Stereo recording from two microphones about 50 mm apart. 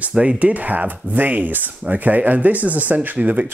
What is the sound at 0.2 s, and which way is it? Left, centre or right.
Speech, right.